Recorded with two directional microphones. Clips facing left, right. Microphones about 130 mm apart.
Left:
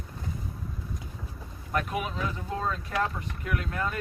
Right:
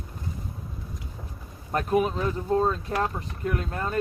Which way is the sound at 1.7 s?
35° right (ahead or behind).